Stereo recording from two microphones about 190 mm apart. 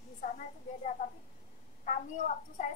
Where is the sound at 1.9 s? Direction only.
40° left (ahead or behind).